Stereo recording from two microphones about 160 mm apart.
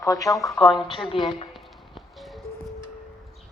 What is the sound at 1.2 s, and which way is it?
Speech, 35° left (ahead or behind).